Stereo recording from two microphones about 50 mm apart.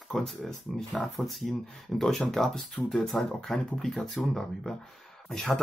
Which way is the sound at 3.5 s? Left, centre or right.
Centre.